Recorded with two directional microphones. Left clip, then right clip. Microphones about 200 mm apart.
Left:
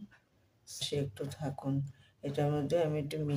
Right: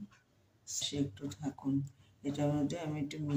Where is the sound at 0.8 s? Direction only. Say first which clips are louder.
Left 2 dB; 55° left (ahead or behind).